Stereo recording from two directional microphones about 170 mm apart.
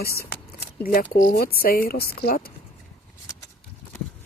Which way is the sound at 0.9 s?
55° left (ahead or behind).